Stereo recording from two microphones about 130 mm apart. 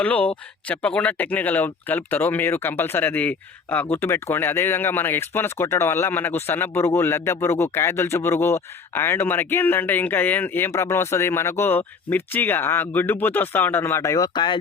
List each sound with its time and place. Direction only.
0.0 s speech: 10° left (ahead or behind); by 14.6 s 35° left (ahead or behind)